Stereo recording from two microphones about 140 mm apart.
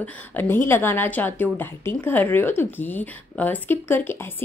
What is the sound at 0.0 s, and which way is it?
A woman's voice, 10° left (ahead or behind).